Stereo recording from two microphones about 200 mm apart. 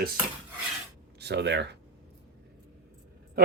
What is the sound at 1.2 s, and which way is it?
Speech, 55° right (ahead or behind).